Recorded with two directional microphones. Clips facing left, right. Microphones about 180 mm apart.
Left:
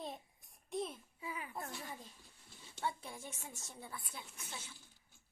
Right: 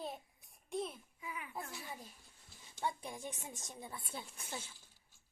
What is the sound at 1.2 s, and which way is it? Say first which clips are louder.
Speech: left 2 dB; 30° left (ahead or behind).